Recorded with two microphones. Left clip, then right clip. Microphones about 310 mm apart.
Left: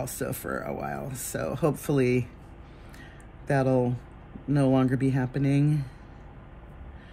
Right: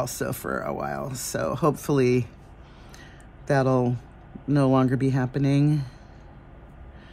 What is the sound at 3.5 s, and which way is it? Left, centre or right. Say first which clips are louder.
Speech: right 2 dB; centre.